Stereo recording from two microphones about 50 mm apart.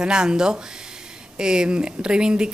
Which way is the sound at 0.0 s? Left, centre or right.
Centre.